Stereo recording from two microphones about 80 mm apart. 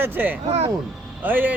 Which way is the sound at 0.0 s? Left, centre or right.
Right.